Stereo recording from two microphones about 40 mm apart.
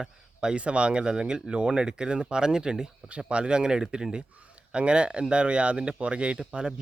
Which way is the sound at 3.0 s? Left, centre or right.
Right.